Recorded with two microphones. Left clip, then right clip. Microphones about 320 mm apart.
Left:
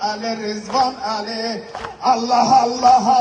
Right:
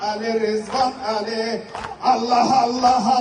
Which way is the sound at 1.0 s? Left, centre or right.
Centre.